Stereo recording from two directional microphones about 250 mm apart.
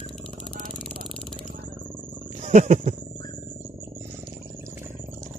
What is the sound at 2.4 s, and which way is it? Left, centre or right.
Wild animals, right.